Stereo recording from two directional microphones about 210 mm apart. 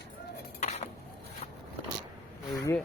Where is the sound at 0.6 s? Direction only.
35° left (ahead or behind).